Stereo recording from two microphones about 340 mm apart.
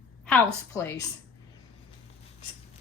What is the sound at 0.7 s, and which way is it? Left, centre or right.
Speech, centre.